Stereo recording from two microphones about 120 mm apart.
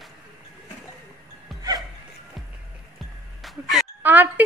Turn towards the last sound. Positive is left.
turn(degrees=-15)  # may be behind; listen again after turning